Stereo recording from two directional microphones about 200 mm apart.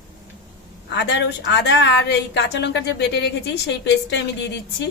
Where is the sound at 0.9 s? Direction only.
60° left (ahead or behind).